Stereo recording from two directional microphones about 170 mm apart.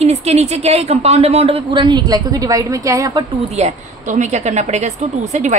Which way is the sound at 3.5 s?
45° right (ahead or behind).